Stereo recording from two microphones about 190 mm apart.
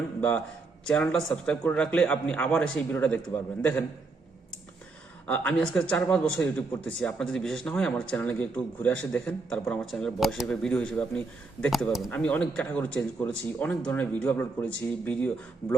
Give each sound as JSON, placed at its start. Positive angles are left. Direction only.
{"t": 0.2, "sound": "a man's voice", "side_deg": 10}
{"t": 5.2, "sound": "speech", "side_deg": 5}